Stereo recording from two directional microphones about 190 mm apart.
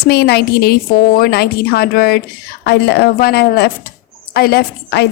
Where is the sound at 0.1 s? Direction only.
60° left (ahead or behind).